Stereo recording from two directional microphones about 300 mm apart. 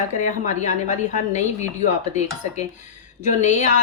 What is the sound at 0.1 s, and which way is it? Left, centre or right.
A woman's voice, left.